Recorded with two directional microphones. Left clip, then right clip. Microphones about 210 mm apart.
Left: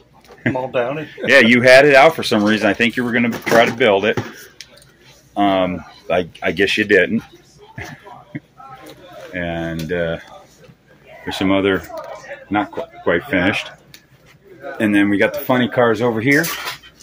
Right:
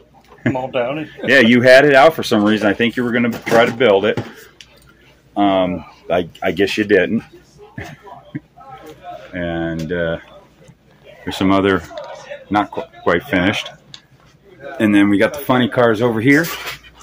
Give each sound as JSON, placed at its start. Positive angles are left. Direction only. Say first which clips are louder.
{"t": 0.6, "sound": "speech", "louder": "even", "side_deg": 30}
{"t": 1.2, "sound": "speech", "louder": "even", "side_deg": -10}
{"t": 5.3, "sound": "speech", "louder": "right 1 dB", "side_deg": -10}
{"t": 9.3, "sound": "speech", "louder": "right 1 dB", "side_deg": -10}
{"t": 11.2, "sound": "speech", "louder": "right 2 dB", "side_deg": -20}
{"t": 14.8, "sound": "speech", "louder": "right 2 dB", "side_deg": -20}